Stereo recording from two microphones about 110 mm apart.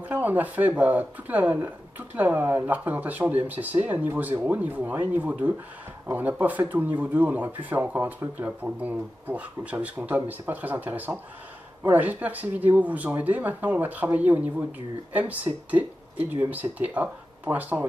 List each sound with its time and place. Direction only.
0.0 s speech: 15° right (ahead or behind)